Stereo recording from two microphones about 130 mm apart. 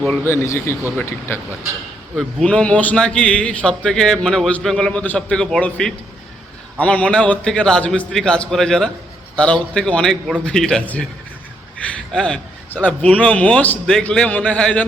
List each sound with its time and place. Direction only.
0.1 s speech: 20° left (ahead or behind)
2.1 s a man's voice: 5° left (ahead or behind)
12.1 s a man's voice: 10° left (ahead or behind)